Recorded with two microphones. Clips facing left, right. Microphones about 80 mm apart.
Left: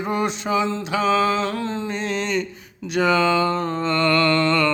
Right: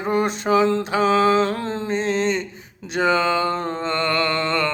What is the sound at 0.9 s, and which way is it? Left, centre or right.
Mantra, right.